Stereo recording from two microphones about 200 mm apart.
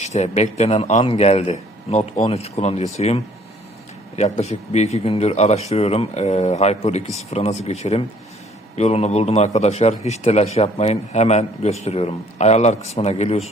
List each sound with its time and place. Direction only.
0.0 s a man's voice: 35° left (ahead or behind)